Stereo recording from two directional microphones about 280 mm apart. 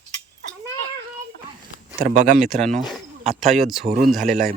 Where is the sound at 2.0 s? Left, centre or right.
Right.